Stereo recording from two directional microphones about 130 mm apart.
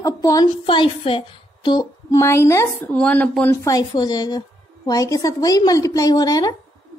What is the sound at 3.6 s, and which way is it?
A woman's voice, 30° left (ahead or behind).